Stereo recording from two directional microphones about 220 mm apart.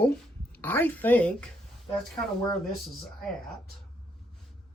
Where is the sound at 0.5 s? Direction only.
10° left (ahead or behind).